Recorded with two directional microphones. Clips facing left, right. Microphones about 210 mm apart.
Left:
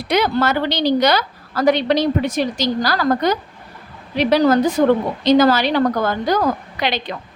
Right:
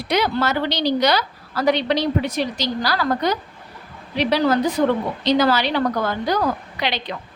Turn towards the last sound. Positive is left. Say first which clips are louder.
# left 3 dB
turn(degrees=45)  # may be behind; listen again after turning